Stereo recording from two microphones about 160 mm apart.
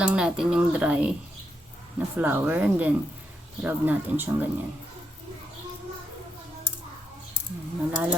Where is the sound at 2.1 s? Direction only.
10° right (ahead or behind).